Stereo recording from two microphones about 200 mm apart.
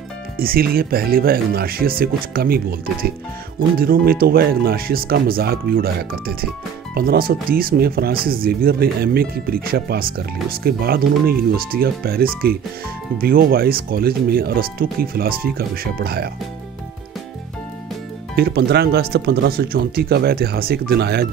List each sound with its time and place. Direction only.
0.4 s speech: 50° right (ahead or behind)
18.3 s speech: 50° right (ahead or behind)